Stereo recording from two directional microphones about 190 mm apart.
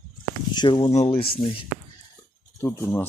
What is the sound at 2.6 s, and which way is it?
Speech, 10° left (ahead or behind).